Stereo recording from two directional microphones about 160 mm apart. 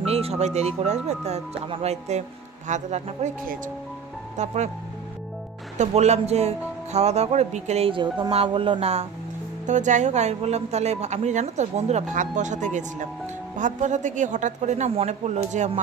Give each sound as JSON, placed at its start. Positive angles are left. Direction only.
{"t": 0.0, "sound": "speech", "side_deg": -40}
{"t": 4.4, "sound": "speech", "side_deg": -50}
{"t": 5.8, "sound": "speech", "side_deg": -45}